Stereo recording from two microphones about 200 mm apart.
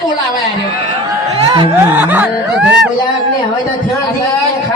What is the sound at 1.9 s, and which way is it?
Music, 10° right (ahead or behind).